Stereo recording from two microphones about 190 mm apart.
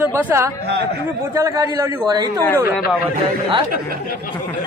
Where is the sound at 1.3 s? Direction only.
15° right (ahead or behind).